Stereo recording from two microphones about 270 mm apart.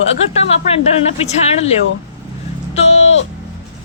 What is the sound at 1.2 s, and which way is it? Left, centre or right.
Speech, left.